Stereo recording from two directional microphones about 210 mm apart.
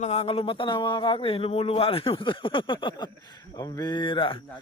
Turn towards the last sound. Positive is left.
turn(degrees=25)  # may be behind; listen again after turning